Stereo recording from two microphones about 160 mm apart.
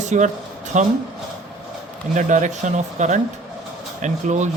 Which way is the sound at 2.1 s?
50° right (ahead or behind).